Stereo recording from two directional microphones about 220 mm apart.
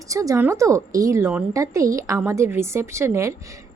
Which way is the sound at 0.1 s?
15° right (ahead or behind).